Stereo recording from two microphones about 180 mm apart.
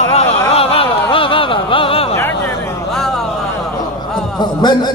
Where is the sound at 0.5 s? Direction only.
30° left (ahead or behind).